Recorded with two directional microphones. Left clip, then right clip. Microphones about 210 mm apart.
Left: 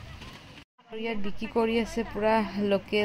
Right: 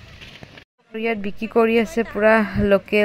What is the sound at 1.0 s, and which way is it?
Speech, 20° right (ahead or behind).